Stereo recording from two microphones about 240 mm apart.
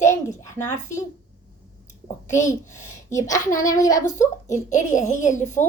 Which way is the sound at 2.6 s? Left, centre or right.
Left.